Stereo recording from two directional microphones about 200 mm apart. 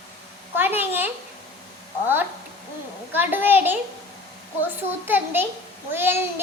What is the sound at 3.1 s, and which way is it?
Speech, 10° right (ahead or behind).